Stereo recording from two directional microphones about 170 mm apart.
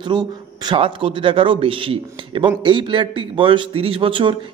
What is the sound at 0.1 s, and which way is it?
A man's voice, 25° right (ahead or behind).